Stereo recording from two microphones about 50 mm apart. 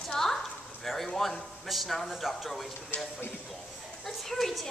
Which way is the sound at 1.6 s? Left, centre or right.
Centre.